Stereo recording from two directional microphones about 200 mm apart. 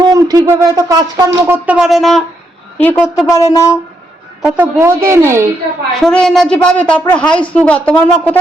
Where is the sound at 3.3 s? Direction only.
15° left (ahead or behind).